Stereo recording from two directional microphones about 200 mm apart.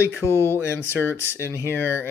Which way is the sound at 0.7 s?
10° left (ahead or behind).